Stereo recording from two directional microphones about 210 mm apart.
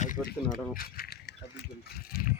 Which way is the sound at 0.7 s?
45° left (ahead or behind).